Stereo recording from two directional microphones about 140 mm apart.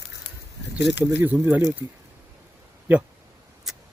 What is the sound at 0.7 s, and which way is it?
Speech, 15° right (ahead or behind).